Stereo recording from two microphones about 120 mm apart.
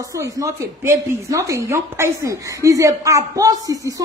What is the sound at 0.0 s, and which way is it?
A woman's voice, 25° right (ahead or behind).